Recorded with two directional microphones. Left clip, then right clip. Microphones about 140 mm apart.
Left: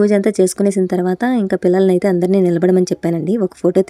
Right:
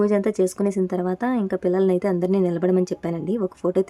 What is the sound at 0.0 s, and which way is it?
A woman's voice, 30° left (ahead or behind).